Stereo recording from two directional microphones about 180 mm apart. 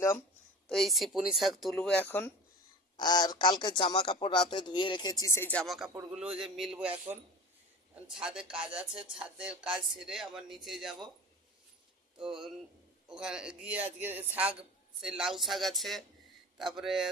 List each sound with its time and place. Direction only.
0.7 s speech: centre (ahead or behind)
3.0 s a man's voice: 25° left (ahead or behind); by 7.0 s 10° right (ahead or behind)
8.0 s speech: 5° right (ahead or behind)
12.1 s a man's voice: 5° right (ahead or behind)